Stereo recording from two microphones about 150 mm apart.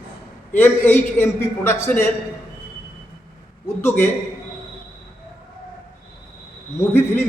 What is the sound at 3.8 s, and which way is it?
Speech, 15° left (ahead or behind).